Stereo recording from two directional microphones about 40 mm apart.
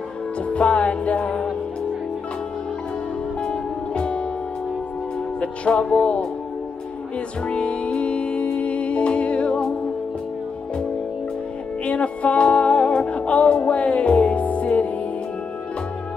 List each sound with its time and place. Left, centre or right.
0.5 s music: left
3.4 s music: left
5.4 s music: left
7.4 s music: left
11.8 s music: left